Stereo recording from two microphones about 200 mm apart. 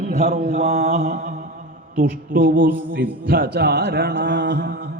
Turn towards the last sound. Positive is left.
turn(degrees=-55)  # may be behind; listen again after turning